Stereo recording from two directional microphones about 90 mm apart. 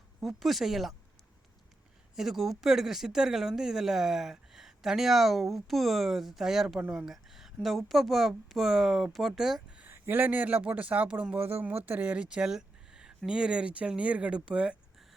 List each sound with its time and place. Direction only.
0.2 s speech: centre (ahead or behind)
2.1 s speech: 5° right (ahead or behind)
9.7 s speech: 20° right (ahead or behind)